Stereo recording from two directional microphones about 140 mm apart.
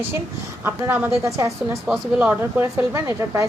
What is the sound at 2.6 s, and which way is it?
Speech, 20° right (ahead or behind).